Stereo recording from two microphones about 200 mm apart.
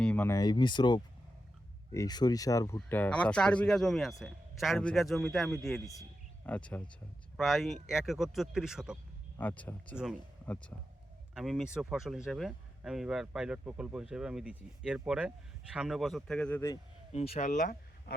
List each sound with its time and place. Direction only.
0.0 s speech: 10° left (ahead or behind)
9.4 s speech: 10° left (ahead or behind)
9.9 s speech: 5° right (ahead or behind)
10.4 s speech: 10° left (ahead or behind)
17.1 s speech: 30° left (ahead or behind)